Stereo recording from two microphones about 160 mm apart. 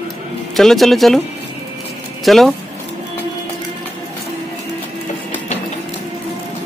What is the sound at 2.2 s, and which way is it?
Speech, centre (ahead or behind).